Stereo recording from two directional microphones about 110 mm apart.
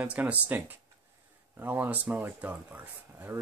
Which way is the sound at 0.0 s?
15° right (ahead or behind).